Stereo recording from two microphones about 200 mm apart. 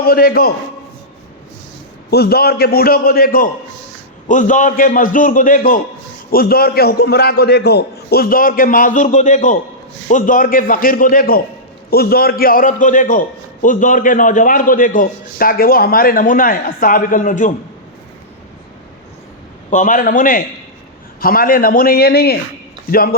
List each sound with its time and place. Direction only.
0.0 s a man's voice: 50° left (ahead or behind)
2.0 s a man's voice: 55° left (ahead or behind)
19.7 s a man's voice: 40° left (ahead or behind)